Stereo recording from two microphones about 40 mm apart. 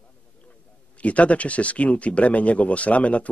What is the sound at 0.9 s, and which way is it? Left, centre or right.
Speech, left.